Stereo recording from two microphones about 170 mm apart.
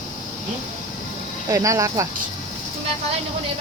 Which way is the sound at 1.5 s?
20° right (ahead or behind).